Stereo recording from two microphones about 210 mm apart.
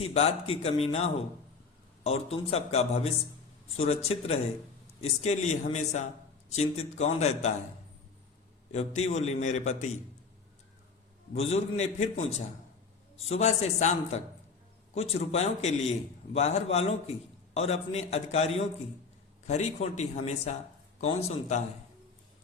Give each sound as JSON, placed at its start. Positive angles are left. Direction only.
{"t": 0.0, "sound": "a man's voice", "side_deg": 30}
{"t": 8.7, "sound": "a man's voice", "side_deg": 30}
{"t": 11.3, "sound": "a man's voice", "side_deg": 30}